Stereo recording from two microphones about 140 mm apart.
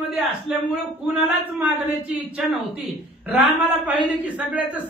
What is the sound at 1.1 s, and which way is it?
Speech, 10° right (ahead or behind).